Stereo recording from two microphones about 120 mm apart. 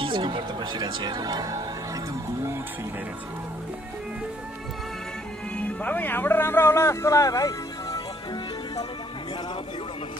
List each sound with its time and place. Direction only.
0.0 s speech: 45° right (ahead or behind)
5.7 s speech: 15° left (ahead or behind)